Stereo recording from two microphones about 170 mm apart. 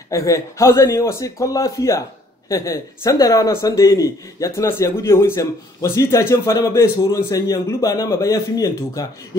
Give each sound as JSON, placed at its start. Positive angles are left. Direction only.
{"t": 0.1, "sound": "a man's voice", "side_deg": 20}